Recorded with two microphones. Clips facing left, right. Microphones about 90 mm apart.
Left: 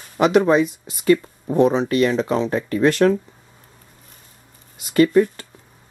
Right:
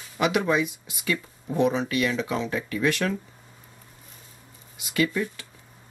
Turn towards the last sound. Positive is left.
turn(degrees=45)  # may be behind; listen again after turning